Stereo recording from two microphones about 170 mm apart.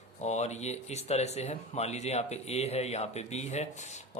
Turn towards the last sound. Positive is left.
turn(degrees=40)  # may be behind; listen again after turning